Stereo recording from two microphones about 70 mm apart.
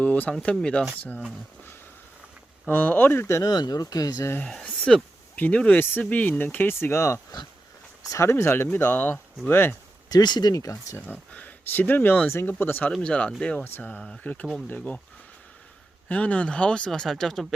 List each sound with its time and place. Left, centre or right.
0.0 s speech: left
2.6 s speech: left
3.4 s speech: left
4.4 s speech: centre; by 9.7 s left
10.1 s speech: left
10.6 s speech: left
11.3 s speech: left
13.0 s speech: centre
13.7 s speech: left
16.0 s speech: centre